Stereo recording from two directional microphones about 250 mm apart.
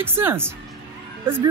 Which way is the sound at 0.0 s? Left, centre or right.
Centre.